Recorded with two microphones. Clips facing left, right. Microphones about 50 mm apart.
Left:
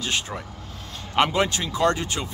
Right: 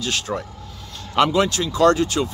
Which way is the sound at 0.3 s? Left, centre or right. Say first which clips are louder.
Right 7 dB; centre.